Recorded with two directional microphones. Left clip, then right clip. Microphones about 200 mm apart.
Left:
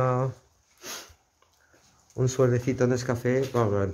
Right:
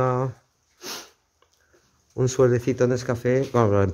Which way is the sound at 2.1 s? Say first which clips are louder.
Right 4 dB; 25° right (ahead or behind).